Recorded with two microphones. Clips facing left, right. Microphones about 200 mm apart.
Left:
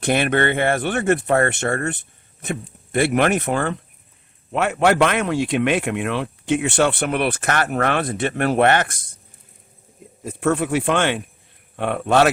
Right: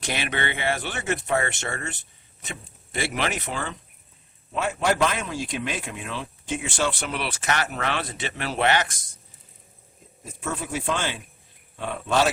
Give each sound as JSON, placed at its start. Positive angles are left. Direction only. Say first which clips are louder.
{"t": 0.0, "sound": "speech", "louder": "left 10 dB", "side_deg": 55}
{"t": 4.5, "sound": "speech", "louder": "left 7 dB", "side_deg": 65}
{"t": 10.2, "sound": "speech", "louder": "left 11 dB", "side_deg": 65}